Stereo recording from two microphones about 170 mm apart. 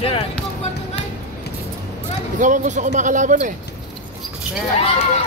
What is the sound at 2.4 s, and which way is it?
Speech, 45° right (ahead or behind).